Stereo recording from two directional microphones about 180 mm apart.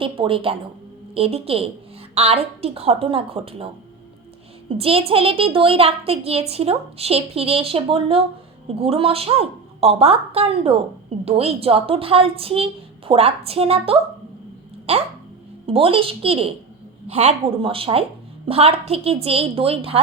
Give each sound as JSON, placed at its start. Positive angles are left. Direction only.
{"t": 0.0, "sound": "a woman's voice", "side_deg": -30}
{"t": 4.7, "sound": "a child's voice", "side_deg": -30}